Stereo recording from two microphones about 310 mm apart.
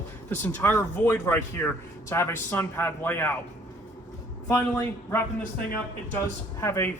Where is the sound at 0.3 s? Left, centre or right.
Centre.